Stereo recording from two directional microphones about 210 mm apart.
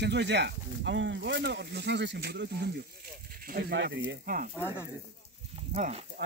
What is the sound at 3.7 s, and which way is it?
Speech, 60° right (ahead or behind).